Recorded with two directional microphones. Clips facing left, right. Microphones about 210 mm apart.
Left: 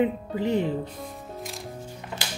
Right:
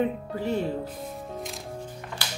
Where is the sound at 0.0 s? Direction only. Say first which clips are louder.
Left 3 dB; 15° left (ahead or behind).